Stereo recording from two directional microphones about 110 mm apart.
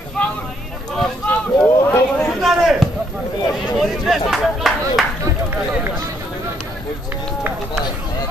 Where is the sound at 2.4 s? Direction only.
Centre (ahead or behind).